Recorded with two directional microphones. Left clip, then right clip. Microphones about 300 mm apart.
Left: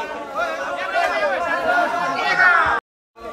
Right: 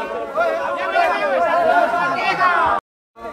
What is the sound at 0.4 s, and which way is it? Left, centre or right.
Chatter, right.